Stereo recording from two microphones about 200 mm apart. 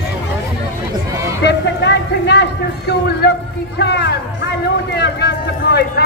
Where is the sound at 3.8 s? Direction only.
55° left (ahead or behind).